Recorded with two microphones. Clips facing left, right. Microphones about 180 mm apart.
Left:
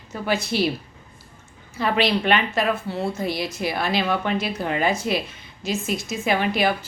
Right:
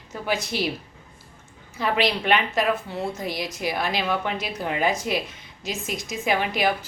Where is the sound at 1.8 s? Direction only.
15° right (ahead or behind).